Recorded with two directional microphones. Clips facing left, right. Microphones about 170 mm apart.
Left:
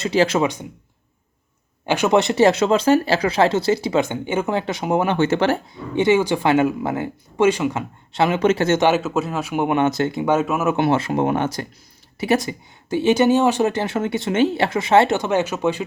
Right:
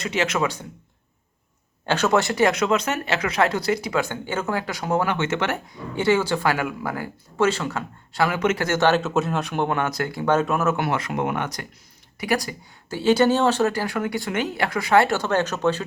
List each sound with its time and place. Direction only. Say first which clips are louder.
0.0 s speech: left 6 dB; 30° left (ahead or behind)
1.9 s speech: left 3 dB; 15° left (ahead or behind)
5.1 s speech: left 6 dB; 35° left (ahead or behind)
6.0 s speech: left 4 dB; 15° left (ahead or behind)
8.9 s speech: left 1 dB; centre (ahead or behind)
9.6 s speech: left 6 dB; 20° left (ahead or behind)
10.2 s speech: even; 5° left (ahead or behind)
10.8 s speech: left 6 dB; 25° left (ahead or behind)
12.5 s speech: left 7 dB; 20° left (ahead or behind)